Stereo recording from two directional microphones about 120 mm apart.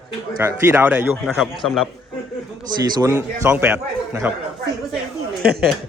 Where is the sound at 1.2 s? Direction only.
Centre (ahead or behind).